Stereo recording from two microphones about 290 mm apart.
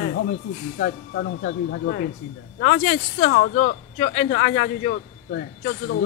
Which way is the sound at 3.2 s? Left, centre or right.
Left.